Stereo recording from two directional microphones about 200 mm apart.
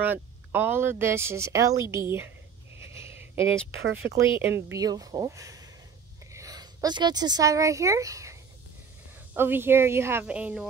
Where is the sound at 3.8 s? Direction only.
60° right (ahead or behind).